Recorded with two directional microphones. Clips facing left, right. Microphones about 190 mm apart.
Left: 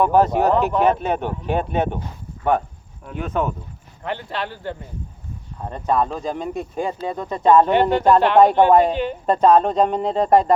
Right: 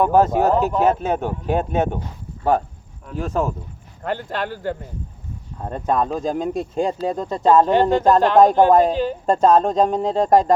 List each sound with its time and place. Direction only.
0.0 s speech: 45° right (ahead or behind)
3.2 s speech: 30° right (ahead or behind)
4.0 s speech: 45° right (ahead or behind)